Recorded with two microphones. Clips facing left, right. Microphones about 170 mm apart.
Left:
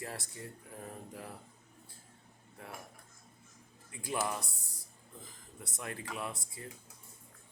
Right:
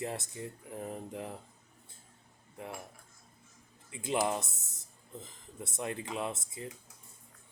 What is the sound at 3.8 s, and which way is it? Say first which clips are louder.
Speech: right 5 dB; 20° right (ahead or behind).